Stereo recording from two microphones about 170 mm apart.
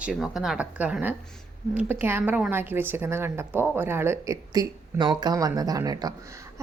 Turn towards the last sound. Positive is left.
turn(degrees=-20)  # may be behind; listen again after turning